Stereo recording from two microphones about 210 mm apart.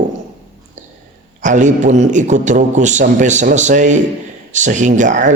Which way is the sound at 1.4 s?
35° right (ahead or behind).